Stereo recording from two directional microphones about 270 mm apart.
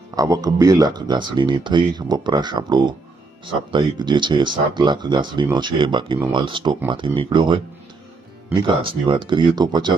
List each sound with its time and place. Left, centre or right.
0.1 s speech: centre
8.6 s speech: centre